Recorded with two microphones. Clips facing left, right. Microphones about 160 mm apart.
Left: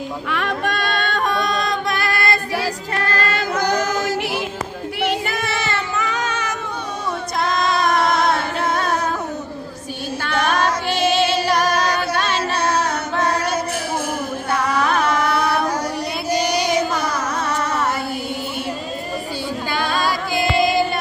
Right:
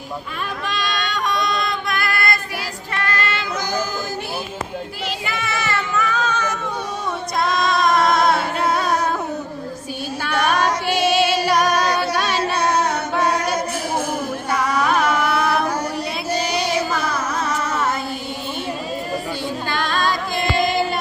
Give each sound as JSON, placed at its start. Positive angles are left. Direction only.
{"t": 0.3, "sound": "female singing", "side_deg": 70}
{"t": 3.5, "sound": "female singing", "side_deg": 65}
{"t": 5.5, "sound": "child singing", "side_deg": 25}
{"t": 7.4, "sound": "singing", "side_deg": 0}
{"t": 10.4, "sound": "music", "side_deg": -10}
{"t": 11.9, "sound": "singing", "side_deg": -10}
{"t": 14.5, "sound": "carnatic music", "side_deg": -10}
{"t": 19.7, "sound": "music", "side_deg": 10}